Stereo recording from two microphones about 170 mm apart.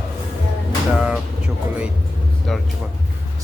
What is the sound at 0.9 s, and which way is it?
Music, 5° right (ahead or behind).